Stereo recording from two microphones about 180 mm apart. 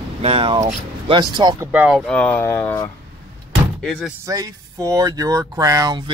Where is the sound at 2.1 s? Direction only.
10° left (ahead or behind).